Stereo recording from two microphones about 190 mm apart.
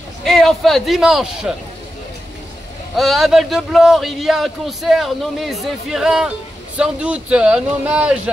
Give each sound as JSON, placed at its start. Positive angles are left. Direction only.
{"t": 0.2, "sound": "a man's voice", "side_deg": 0}
{"t": 3.0, "sound": "a man's voice", "side_deg": 0}